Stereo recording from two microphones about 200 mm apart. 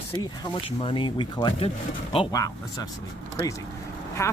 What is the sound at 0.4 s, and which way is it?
Speech, 25° left (ahead or behind).